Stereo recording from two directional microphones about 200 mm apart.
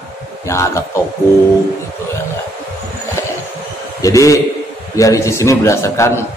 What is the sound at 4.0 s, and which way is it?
A man's voice, 15° left (ahead or behind).